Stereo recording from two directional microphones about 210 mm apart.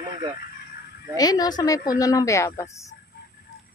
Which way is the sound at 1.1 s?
20° left (ahead or behind).